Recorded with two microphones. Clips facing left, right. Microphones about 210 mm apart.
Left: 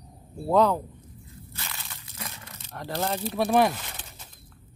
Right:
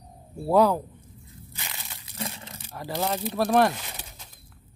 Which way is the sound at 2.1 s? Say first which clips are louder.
Right 6 dB; 30° right (ahead or behind).